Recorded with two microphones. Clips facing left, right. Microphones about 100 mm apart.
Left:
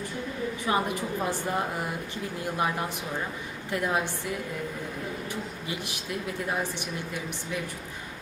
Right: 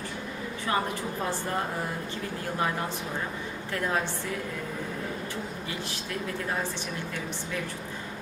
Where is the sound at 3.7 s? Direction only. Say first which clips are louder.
Left 2 dB; 15° left (ahead or behind).